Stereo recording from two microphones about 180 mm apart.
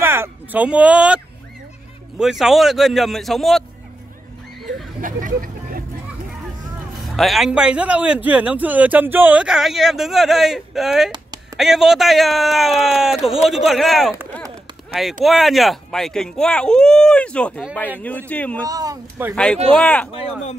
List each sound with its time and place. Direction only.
0.0 s a man's voice: 15° right (ahead or behind)
5.0 s vehicle: 50° right (ahead or behind)
7.0 s a man's voice: centre (ahead or behind)
15.2 s a man's voice: centre (ahead or behind)
18.7 s speech: 20° right (ahead or behind)
19.3 s a man's voice: 5° left (ahead or behind)
20.1 s speech: 35° left (ahead or behind)